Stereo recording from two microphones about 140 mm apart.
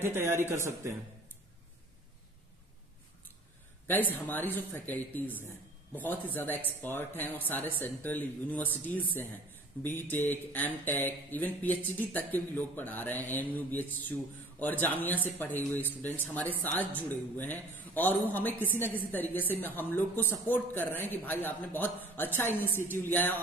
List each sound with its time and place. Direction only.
0.0 s a man's voice: 20° right (ahead or behind)
3.9 s speech: 15° left (ahead or behind)